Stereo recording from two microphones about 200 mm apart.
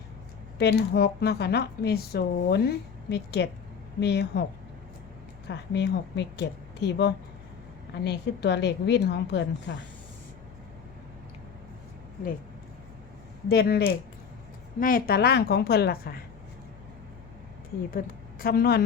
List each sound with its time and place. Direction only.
0.6 s speech: 55° left (ahead or behind)
5.5 s speech: 60° left (ahead or behind)
13.5 s a woman's voice: 50° left (ahead or behind)
17.9 s a woman's voice: 50° left (ahead or behind)